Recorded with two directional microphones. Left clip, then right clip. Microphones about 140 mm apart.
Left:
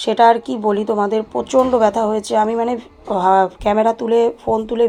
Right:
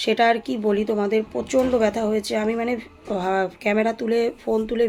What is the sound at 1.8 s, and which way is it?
A woman's voice, 40° right (ahead or behind).